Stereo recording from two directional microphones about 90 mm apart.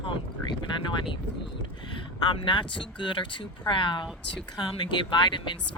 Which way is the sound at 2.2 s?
60° left (ahead or behind).